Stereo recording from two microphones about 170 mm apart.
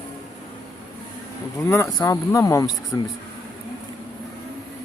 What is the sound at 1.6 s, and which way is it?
Speech, 15° left (ahead or behind).